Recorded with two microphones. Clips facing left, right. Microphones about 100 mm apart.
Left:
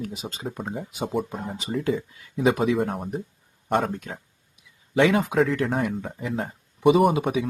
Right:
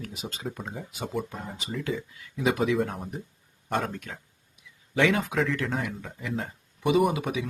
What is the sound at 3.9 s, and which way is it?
Speech, 25° left (ahead or behind).